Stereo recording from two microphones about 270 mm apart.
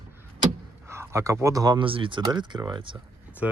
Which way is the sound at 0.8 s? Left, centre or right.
Centre.